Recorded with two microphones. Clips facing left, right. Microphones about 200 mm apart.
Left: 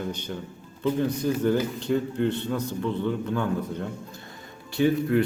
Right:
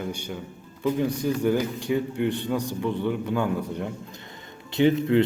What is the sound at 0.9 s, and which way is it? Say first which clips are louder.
A man's voice: even; 10° right (ahead or behind).